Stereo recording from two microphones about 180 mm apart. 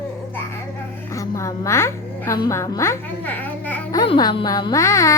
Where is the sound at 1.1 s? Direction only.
15° left (ahead or behind).